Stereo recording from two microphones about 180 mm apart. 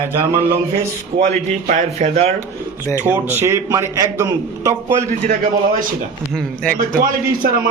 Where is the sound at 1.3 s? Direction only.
45° right (ahead or behind).